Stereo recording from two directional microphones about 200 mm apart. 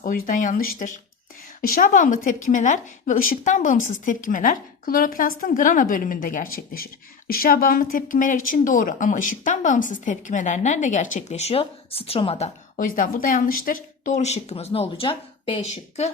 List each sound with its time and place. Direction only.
0.0 s a woman's voice: 40° left (ahead or behind)
12.7 s a woman's voice: 45° left (ahead or behind)